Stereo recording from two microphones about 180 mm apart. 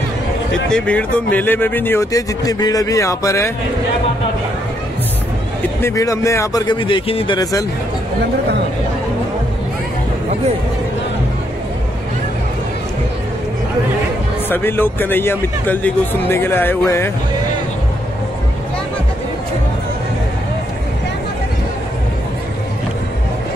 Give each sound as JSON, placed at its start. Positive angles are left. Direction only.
{"t": 0.7, "sound": "speech", "side_deg": 5}
{"t": 5.8, "sound": "a man's voice", "side_deg": 15}
{"t": 14.5, "sound": "speech", "side_deg": 10}